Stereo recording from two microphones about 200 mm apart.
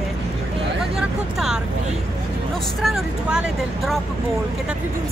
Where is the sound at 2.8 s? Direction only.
Centre (ahead or behind).